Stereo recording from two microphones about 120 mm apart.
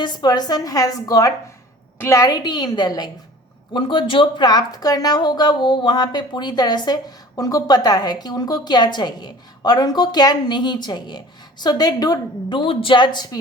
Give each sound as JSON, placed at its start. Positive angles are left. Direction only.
{"t": 0.0, "sound": "a woman's voice", "side_deg": 35}